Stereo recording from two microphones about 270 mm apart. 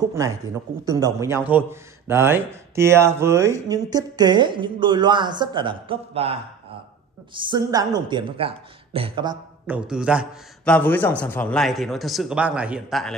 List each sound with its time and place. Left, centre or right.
0.8 s a man's voice: centre
9.8 s a man's voice: centre